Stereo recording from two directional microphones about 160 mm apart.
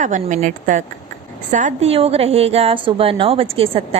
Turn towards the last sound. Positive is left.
turn(degrees=-35)  # may be behind; listen again after turning